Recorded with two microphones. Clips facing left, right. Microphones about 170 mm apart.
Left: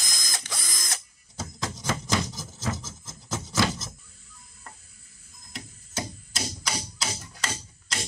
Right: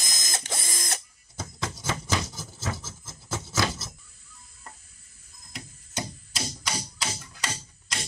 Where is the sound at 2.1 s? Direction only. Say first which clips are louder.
Left 2 dB; 5° right (ahead or behind).